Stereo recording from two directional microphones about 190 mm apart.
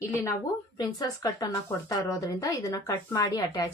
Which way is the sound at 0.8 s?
20° left (ahead or behind).